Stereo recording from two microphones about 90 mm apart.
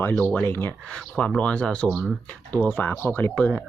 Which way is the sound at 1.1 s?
10° left (ahead or behind).